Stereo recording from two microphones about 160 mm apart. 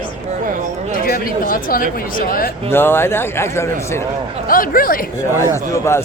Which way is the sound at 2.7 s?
15° left (ahead or behind).